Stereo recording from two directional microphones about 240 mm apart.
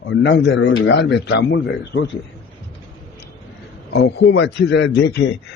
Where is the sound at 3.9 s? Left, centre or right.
Left.